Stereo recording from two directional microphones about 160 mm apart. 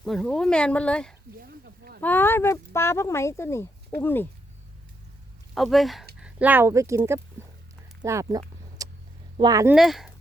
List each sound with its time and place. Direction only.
0.0 s speech: 5° left (ahead or behind)
1.4 s a sound: 70° right (ahead or behind)
2.0 s speech: 10° left (ahead or behind)
5.5 s speech: centre (ahead or behind); by 7.2 s 15° right (ahead or behind)
7.4 s a sound: 15° right (ahead or behind)
8.0 s speech: 20° right (ahead or behind)
8.8 s vehicle: 20° right (ahead or behind)
9.4 s speech: 25° right (ahead or behind)
9.7 s speech: centre (ahead or behind)